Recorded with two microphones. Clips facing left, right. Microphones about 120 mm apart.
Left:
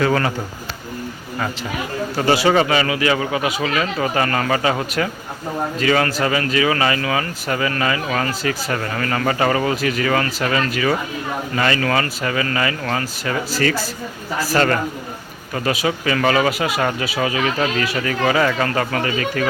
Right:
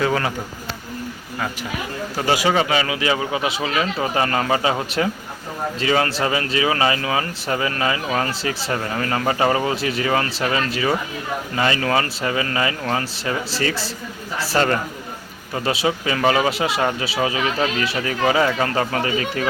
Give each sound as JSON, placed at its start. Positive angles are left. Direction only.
{"t": 0.0, "sound": "speech", "side_deg": -10}
{"t": 2.1, "sound": "speech", "side_deg": -15}
{"t": 8.3, "sound": "speech", "side_deg": -30}
{"t": 8.7, "sound": "speech", "side_deg": -15}